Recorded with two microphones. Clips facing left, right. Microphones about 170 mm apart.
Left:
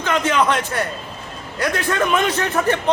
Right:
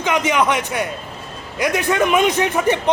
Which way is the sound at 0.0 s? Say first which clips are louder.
Right 1 dB; 15° right (ahead or behind).